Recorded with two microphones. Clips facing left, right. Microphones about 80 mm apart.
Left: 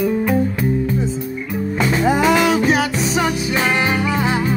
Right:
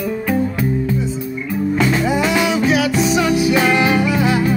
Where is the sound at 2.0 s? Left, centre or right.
Left.